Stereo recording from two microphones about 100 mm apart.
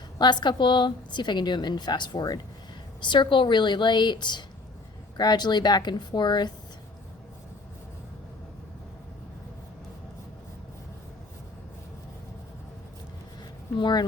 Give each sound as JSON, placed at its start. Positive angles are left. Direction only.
{"t": 0.2, "sound": "a woman's voice", "side_deg": 45}
{"t": 3.0, "sound": "a woman's voice", "side_deg": 50}
{"t": 13.7, "sound": "speech", "side_deg": 50}